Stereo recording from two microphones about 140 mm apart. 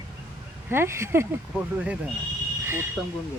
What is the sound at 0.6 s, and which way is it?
Speech, 15° right (ahead or behind).